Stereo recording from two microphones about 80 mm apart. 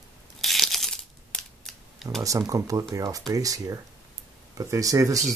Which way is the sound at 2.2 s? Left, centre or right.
Right.